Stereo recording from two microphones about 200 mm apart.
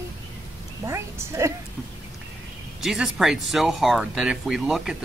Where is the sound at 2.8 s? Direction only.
Centre (ahead or behind).